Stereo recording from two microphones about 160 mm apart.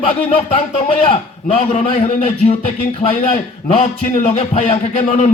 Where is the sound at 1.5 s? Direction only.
45° left (ahead or behind).